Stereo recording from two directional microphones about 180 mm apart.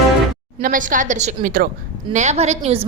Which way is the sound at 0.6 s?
50° right (ahead or behind).